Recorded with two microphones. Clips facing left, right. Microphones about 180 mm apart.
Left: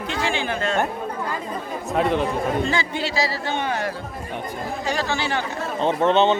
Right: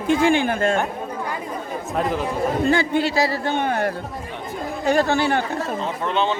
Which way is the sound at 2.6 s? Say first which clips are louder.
Right 5 dB; 55° right (ahead or behind).